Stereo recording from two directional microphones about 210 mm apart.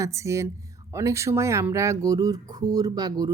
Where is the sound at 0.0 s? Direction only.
15° right (ahead or behind).